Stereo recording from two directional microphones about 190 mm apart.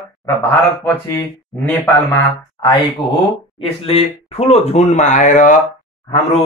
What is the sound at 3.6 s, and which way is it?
Speech, 30° left (ahead or behind).